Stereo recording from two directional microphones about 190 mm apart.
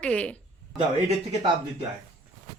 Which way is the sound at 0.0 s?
5° left (ahead or behind).